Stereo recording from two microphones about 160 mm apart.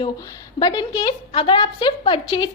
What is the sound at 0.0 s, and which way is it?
A woman's voice, 25° left (ahead or behind).